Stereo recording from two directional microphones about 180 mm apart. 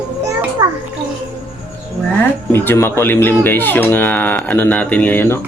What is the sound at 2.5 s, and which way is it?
Speech, 15° left (ahead or behind).